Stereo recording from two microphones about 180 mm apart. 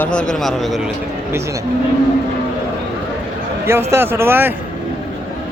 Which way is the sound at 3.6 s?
15° right (ahead or behind).